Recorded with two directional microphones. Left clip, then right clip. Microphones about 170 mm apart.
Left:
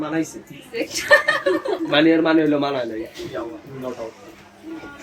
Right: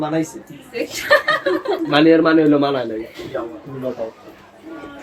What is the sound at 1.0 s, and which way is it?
Speech, centre (ahead or behind).